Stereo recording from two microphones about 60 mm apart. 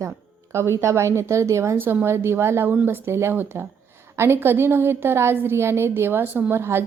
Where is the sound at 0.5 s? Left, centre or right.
Right.